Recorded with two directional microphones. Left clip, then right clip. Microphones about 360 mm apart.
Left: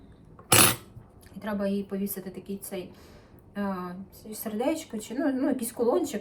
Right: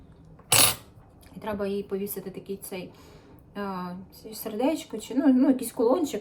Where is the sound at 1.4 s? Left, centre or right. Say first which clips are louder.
Right 1 dB; centre.